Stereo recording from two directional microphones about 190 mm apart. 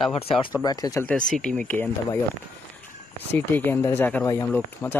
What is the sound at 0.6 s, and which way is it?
Speech, 20° left (ahead or behind).